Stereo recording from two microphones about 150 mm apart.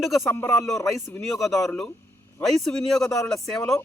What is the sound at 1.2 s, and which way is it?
Speech, centre (ahead or behind).